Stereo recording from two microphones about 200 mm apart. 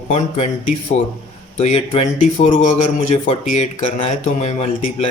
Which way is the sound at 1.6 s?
35° left (ahead or behind).